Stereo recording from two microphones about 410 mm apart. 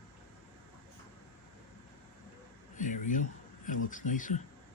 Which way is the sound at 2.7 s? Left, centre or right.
Centre.